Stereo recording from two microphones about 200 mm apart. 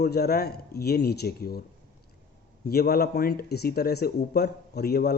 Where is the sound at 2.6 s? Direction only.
50° left (ahead or behind).